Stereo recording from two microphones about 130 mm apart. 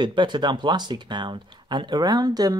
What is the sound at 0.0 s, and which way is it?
Speech, 35° right (ahead or behind).